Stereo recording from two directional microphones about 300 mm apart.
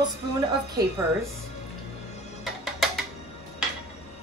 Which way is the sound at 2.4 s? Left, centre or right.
Centre.